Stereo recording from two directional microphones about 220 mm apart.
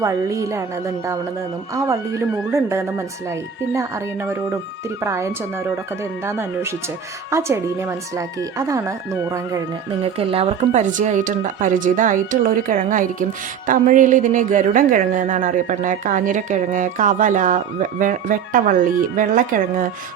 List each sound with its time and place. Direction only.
0.0 s a woman's voice: 15° right (ahead or behind); by 19.9 s 40° right (ahead or behind)